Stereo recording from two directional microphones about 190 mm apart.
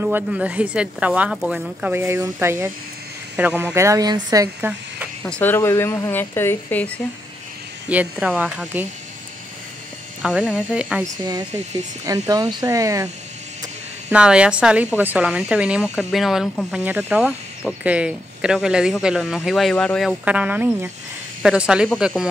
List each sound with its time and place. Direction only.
0.0 s speech: 10° right (ahead or behind)
5.2 s speech: 10° left (ahead or behind)
7.9 s speech: 5° right (ahead or behind)
10.2 s speech: 5° right (ahead or behind)
11.2 s speech: 20° right (ahead or behind)
14.1 s speech: 5° right (ahead or behind)